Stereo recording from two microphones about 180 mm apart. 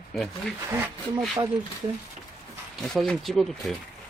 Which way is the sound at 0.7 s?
15° right (ahead or behind).